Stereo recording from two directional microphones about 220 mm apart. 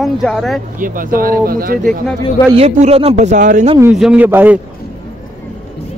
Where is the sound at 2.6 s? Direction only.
25° right (ahead or behind).